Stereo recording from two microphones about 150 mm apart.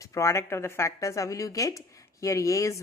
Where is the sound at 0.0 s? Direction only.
20° left (ahead or behind).